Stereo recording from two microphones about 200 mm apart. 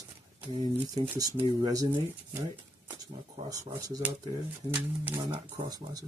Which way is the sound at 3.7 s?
15° right (ahead or behind).